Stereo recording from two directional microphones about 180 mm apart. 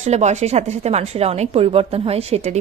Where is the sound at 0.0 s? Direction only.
40° right (ahead or behind).